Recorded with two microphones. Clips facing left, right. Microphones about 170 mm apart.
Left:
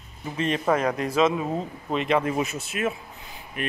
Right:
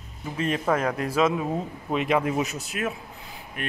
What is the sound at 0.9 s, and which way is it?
A man's voice, 5° right (ahead or behind).